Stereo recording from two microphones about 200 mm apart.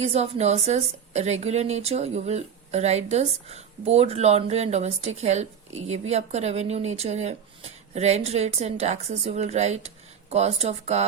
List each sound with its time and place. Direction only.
0.1 s a woman's voice: 35° right (ahead or behind)